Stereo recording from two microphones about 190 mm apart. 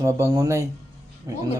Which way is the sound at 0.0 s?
15° right (ahead or behind).